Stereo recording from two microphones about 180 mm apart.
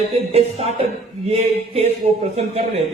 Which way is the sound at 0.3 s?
35° right (ahead or behind).